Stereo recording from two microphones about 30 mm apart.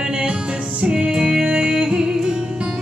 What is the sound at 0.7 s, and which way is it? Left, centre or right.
Music, right.